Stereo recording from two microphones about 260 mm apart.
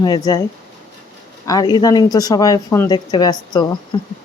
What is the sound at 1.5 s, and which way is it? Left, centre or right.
Speech, centre.